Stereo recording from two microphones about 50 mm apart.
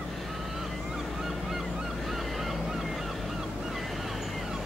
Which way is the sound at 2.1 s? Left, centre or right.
Centre.